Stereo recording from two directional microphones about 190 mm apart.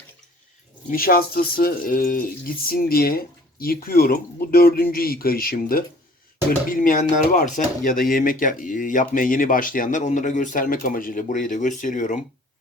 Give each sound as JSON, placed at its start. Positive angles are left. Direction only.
{"t": 0.9, "sound": "speech", "side_deg": 50}